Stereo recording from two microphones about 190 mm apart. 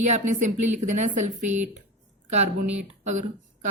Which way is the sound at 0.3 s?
40° right (ahead or behind).